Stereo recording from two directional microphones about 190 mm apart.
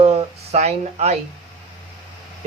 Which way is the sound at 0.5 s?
35° right (ahead or behind).